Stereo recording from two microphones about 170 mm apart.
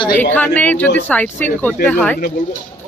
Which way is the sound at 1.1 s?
10° left (ahead or behind).